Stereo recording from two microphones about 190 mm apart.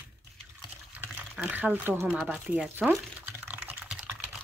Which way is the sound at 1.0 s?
10° right (ahead or behind).